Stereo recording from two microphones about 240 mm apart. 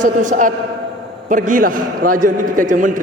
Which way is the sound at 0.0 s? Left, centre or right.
Right.